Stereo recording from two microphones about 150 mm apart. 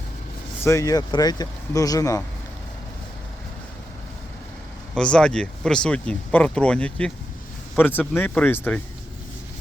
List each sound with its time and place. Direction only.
0.6 s speech: 20° left (ahead or behind)
4.9 s speech: 5° left (ahead or behind)